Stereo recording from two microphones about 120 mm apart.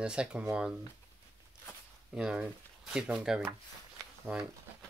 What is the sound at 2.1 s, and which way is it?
Speech, 10° right (ahead or behind).